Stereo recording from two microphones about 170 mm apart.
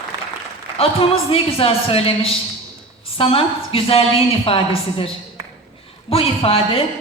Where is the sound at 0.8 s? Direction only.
35° left (ahead or behind).